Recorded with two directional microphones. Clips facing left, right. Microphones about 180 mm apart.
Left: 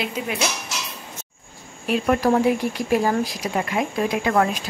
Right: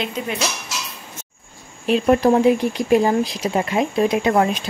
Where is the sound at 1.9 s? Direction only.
25° right (ahead or behind).